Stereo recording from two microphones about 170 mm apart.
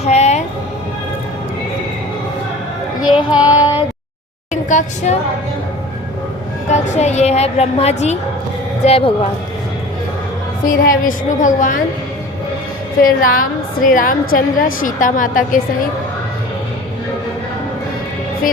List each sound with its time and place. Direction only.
0.0 s music: 40° left (ahead or behind)
3.0 s child singing: 5° right (ahead or behind)
3.6 s child singing: 25° left (ahead or behind)
4.5 s a woman's voice: 45° left (ahead or behind)
6.7 s a woman's voice: 40° left (ahead or behind)
10.8 s a woman's voice: 50° left (ahead or behind)
13.0 s a woman's voice: 55° left (ahead or behind)